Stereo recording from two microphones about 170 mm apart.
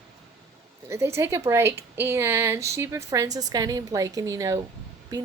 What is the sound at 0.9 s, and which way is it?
A woman's voice, 15° right (ahead or behind).